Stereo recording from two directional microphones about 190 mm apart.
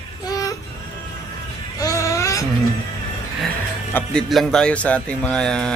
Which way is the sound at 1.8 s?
15° left (ahead or behind).